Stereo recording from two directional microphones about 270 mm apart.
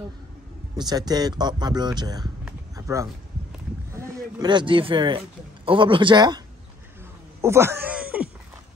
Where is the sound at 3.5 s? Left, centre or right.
Centre.